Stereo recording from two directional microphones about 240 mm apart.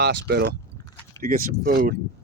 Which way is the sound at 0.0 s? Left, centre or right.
Right.